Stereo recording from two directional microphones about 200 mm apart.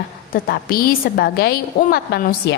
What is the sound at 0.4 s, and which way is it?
A woman's voice, 50° left (ahead or behind).